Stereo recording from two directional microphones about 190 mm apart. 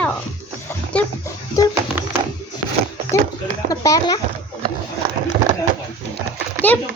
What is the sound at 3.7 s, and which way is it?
Speech, 20° left (ahead or behind).